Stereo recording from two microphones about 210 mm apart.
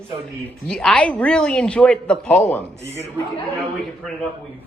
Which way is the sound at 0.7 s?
5° left (ahead or behind).